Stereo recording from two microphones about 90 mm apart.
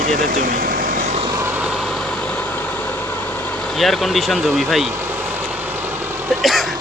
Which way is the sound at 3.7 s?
Centre (ahead or behind).